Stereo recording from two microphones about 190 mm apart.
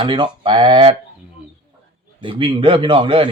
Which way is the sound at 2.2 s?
25° right (ahead or behind).